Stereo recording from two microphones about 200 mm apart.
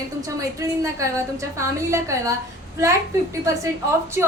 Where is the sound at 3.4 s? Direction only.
15° right (ahead or behind).